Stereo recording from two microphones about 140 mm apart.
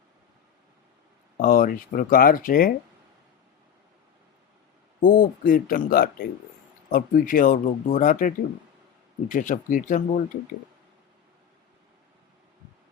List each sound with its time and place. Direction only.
1.4 s speech: 90° left
5.0 s speech: 80° left
6.9 s speech: 75° left (ahead or behind)
9.3 s speech: 70° left (ahead or behind)